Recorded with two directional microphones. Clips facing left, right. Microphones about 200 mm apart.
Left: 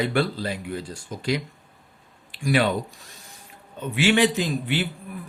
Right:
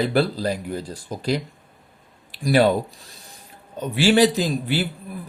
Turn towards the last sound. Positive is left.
turn(degrees=-40)  # may be behind; listen again after turning